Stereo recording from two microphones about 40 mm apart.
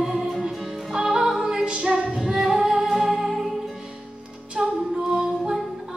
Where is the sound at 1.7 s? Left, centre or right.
Right.